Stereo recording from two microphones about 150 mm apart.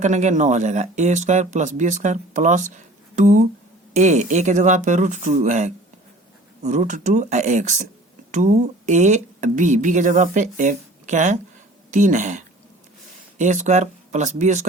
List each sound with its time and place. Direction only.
0.0 s speech: 55° right (ahead or behind)